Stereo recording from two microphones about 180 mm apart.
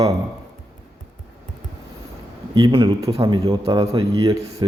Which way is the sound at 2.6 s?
25° right (ahead or behind).